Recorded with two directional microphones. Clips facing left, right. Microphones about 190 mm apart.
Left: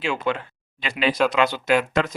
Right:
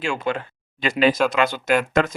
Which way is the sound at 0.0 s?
45° right (ahead or behind).